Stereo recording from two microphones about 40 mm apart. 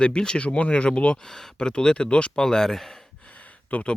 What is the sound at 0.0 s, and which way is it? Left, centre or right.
Speech, left.